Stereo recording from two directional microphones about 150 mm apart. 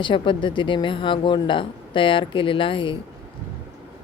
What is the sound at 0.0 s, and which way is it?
Speech, 30° left (ahead or behind).